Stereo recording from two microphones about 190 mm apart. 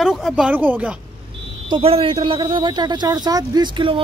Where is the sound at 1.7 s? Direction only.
30° right (ahead or behind).